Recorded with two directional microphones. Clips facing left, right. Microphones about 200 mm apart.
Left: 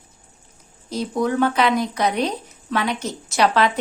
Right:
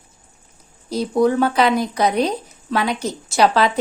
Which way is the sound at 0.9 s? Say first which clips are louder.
Right 5 dB; 35° right (ahead or behind).